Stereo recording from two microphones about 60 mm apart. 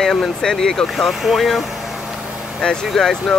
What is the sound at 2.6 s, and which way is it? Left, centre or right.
Speech, centre.